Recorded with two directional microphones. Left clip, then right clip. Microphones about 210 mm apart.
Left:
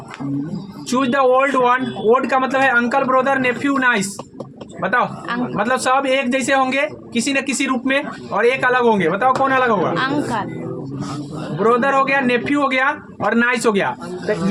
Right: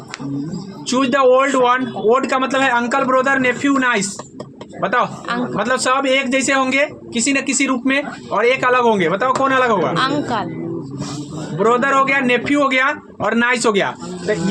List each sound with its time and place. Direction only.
0.9 s a man's voice: 20° right (ahead or behind)
11.6 s speech: 20° right (ahead or behind)